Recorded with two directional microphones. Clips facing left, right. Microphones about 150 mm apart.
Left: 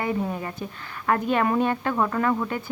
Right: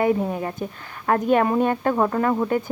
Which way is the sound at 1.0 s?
40° right (ahead or behind).